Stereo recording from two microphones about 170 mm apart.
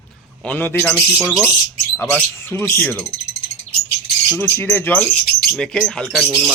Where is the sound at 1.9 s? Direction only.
10° left (ahead or behind).